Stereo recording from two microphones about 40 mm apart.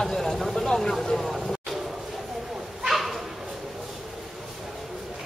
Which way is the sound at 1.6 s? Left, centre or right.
Centre.